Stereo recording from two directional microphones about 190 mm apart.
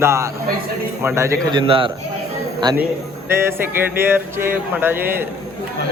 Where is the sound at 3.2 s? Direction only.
15° right (ahead or behind).